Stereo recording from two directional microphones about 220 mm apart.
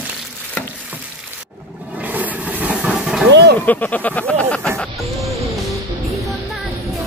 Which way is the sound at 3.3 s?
50° right (ahead or behind).